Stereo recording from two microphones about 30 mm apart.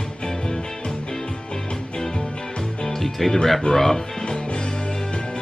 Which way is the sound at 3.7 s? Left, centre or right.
Centre.